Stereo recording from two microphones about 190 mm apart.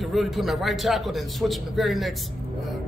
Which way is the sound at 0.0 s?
Centre (ahead or behind).